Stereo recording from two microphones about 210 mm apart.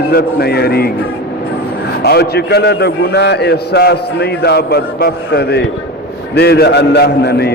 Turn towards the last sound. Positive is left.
turn(degrees=50)  # may be behind; listen again after turning